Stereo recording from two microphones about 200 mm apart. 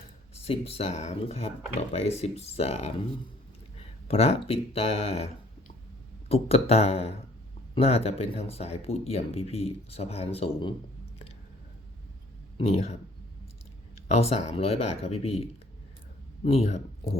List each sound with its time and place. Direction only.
0.3 s speech: 30° left (ahead or behind)
4.1 s speech: 30° left (ahead or behind)
12.5 s speech: 30° left (ahead or behind)
14.1 s speech: 30° left (ahead or behind)